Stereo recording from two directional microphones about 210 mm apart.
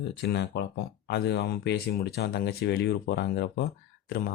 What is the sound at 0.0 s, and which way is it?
Speech, 55° left (ahead or behind).